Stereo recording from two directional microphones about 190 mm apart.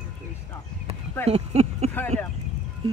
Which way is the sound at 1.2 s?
35° right (ahead or behind).